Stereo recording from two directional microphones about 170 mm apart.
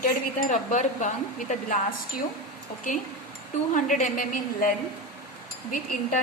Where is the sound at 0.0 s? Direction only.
55° left (ahead or behind).